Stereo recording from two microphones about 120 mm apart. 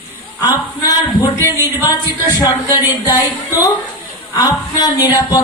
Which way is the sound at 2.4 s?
30° left (ahead or behind).